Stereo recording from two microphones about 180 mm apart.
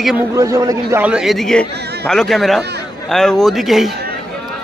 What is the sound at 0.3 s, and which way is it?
Speech, 20° right (ahead or behind).